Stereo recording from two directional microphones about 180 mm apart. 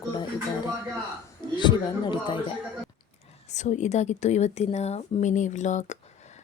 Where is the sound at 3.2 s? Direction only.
40° left (ahead or behind).